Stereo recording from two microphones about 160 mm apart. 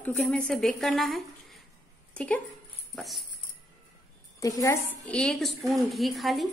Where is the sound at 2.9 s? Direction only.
Centre (ahead or behind).